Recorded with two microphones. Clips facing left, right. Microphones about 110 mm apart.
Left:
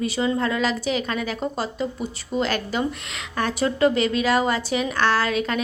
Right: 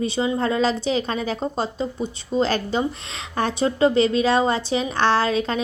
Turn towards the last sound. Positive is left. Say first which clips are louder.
# right 2 dB
turn(degrees=-30)  # may be behind; listen again after turning